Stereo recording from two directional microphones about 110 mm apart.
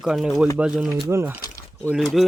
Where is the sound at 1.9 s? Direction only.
Centre (ahead or behind).